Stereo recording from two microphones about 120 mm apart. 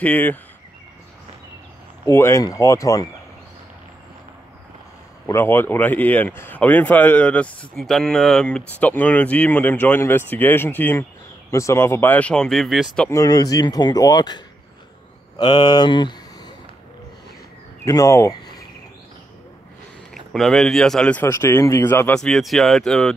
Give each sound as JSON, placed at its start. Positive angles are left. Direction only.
{"t": 0.0, "sound": "speech", "side_deg": 15}
{"t": 2.0, "sound": "speech", "side_deg": 20}
{"t": 5.2, "sound": "speech", "side_deg": 20}
{"t": 13.1, "sound": "speech", "side_deg": 30}
{"t": 17.8, "sound": "speech", "side_deg": 25}
{"t": 20.3, "sound": "speech", "side_deg": 0}
{"t": 21.2, "sound": "speech", "side_deg": 20}
{"t": 22.1, "sound": "speech", "side_deg": 5}